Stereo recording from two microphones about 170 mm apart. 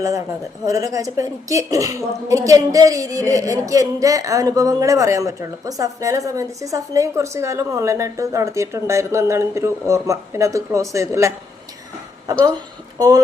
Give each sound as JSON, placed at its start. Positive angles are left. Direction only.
{"t": 0.6, "sound": "a woman's voice", "side_deg": -20}